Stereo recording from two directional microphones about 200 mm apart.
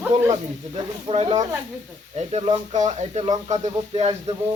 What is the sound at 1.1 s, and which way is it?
Speech, 30° right (ahead or behind).